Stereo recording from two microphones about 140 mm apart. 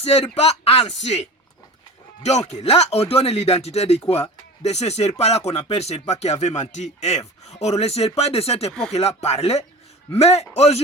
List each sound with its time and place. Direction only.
0.0 s speech: 50° left (ahead or behind)
2.5 s speech: 50° left (ahead or behind)